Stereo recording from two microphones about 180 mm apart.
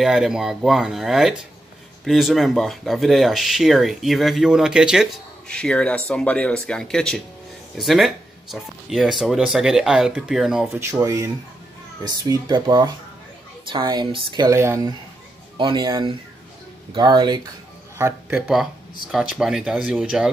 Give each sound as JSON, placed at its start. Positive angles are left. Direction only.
{"t": 0.0, "sound": "speech", "side_deg": -5}
{"t": 10.7, "sound": "speech", "side_deg": -15}
{"t": 19.1, "sound": "speech", "side_deg": 0}